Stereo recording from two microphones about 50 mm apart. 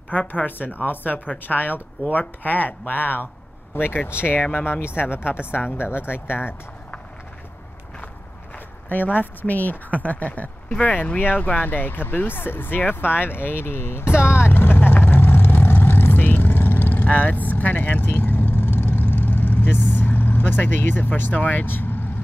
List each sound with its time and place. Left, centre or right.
0.1 s speech: left
8.8 s speech: left